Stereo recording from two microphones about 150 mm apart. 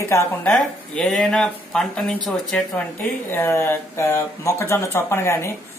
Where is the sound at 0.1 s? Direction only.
20° left (ahead or behind).